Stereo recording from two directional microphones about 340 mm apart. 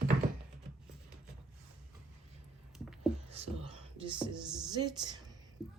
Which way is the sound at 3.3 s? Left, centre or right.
Centre.